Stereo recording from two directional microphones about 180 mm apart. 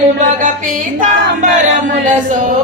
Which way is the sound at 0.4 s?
45° right (ahead or behind).